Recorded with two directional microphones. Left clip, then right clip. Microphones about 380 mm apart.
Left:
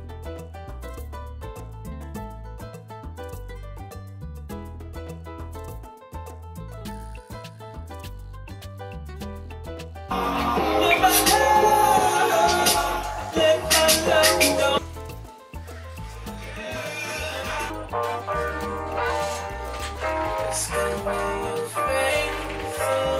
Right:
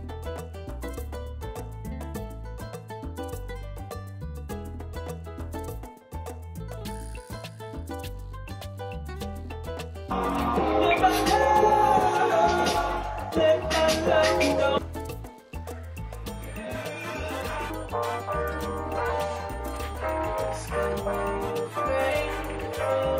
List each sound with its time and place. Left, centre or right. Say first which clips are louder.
1.4 s music: right 1 dB; right
6.8 s music: left 1 dB; right
8.7 s music: right 1 dB; right
10.1 s music: left 3 dB; centre
16.5 s music: left 4 dB; centre